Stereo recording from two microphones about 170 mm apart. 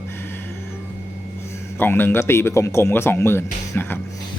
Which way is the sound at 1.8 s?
10° left (ahead or behind).